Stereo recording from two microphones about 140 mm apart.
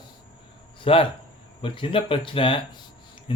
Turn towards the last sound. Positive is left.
turn(degrees=35)  # may be behind; listen again after turning